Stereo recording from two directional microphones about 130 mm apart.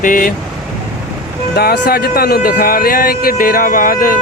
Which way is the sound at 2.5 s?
90° left.